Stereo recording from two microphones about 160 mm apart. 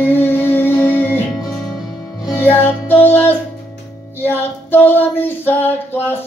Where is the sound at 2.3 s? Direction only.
15° left (ahead or behind).